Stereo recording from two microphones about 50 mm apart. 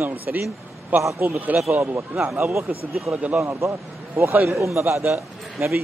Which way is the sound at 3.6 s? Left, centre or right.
Right.